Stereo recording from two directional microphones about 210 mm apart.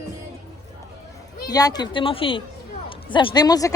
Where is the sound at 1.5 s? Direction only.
15° left (ahead or behind).